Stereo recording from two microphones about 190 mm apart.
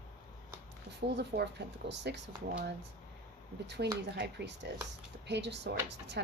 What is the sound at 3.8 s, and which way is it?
Speech, 60° right (ahead or behind).